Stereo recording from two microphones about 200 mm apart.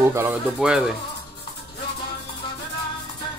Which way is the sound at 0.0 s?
10° right (ahead or behind).